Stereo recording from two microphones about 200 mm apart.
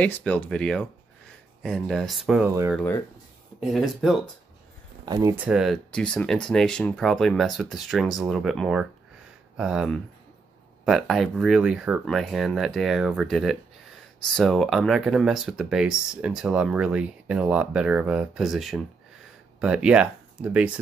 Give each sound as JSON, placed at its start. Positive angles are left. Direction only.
{"t": 0.0, "sound": "speech", "side_deg": 5}
{"t": 2.7, "sound": "speech", "side_deg": 10}
{"t": 5.0, "sound": "speech", "side_deg": -20}
{"t": 5.4, "sound": "speech", "side_deg": -5}